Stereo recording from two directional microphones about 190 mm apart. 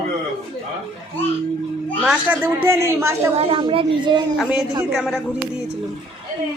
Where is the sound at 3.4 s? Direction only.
25° right (ahead or behind).